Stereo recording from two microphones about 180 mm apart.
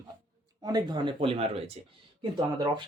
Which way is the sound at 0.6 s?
20° right (ahead or behind).